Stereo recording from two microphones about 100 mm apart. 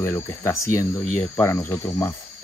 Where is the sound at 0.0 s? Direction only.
30° left (ahead or behind).